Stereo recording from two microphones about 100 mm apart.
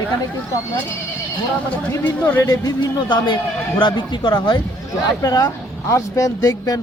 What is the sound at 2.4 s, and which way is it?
A man's voice, 40° left (ahead or behind).